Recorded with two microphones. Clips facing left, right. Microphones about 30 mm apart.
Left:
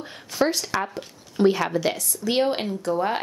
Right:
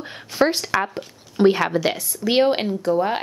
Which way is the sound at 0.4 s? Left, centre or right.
Right.